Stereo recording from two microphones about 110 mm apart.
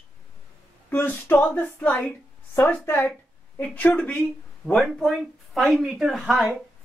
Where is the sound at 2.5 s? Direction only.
20° left (ahead or behind).